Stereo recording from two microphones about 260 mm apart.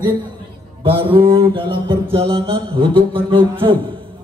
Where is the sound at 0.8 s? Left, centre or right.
Centre.